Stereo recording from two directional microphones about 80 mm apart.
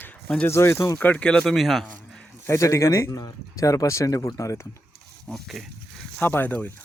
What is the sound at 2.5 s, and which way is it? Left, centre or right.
Speech, left.